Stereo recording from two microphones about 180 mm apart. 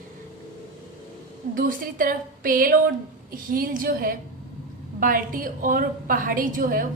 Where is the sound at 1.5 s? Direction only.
50° right (ahead or behind).